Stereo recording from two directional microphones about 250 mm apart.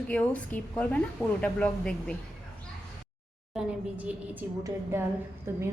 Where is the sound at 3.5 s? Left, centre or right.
Centre.